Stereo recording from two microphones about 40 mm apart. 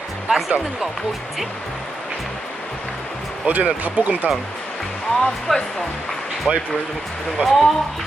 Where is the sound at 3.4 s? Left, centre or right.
Right.